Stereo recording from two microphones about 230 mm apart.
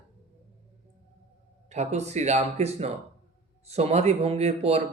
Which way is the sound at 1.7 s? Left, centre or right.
Right.